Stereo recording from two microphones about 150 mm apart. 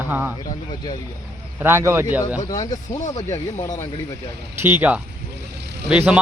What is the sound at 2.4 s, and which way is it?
Speech, 25° left (ahead or behind).